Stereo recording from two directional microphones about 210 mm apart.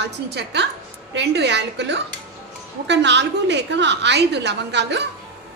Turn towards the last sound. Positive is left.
turn(degrees=-55)  # may be behind; listen again after turning